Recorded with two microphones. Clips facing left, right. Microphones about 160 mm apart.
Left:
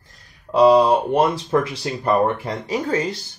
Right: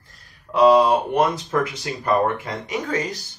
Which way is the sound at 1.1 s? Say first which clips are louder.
Left 2 dB; 30° left (ahead or behind).